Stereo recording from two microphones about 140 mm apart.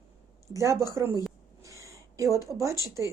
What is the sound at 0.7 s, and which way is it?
Speech, 25° left (ahead or behind).